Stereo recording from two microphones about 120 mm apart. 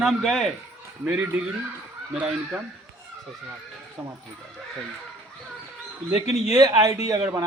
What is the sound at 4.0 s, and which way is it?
Speech, 10° right (ahead or behind).